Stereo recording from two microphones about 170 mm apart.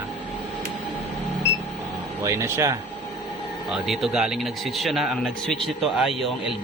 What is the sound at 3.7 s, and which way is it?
Speech, centre (ahead or behind).